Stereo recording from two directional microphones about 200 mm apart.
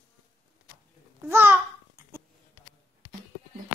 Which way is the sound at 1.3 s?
10° right (ahead or behind).